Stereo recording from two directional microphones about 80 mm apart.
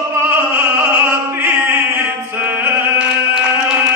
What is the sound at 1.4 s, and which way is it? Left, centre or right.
Chant, right.